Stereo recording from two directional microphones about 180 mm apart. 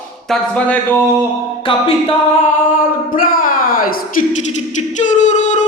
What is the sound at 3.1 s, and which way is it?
Speech, 50° left (ahead or behind).